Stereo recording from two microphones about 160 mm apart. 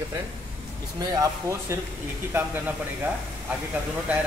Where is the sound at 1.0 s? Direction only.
20° right (ahead or behind).